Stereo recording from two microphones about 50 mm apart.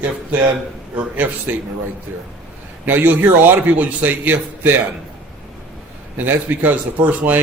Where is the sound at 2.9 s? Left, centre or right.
Right.